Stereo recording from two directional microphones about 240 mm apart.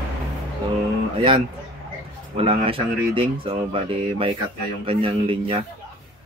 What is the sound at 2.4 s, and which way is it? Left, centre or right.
Speech, right.